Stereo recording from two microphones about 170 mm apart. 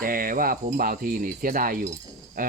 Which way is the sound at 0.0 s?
55° right (ahead or behind).